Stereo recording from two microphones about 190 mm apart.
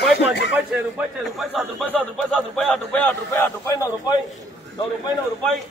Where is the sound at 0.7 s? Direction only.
Centre (ahead or behind); by 4.1 s 15° left (ahead or behind).